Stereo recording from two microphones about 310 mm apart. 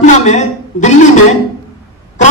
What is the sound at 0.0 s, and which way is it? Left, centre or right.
Speech, left.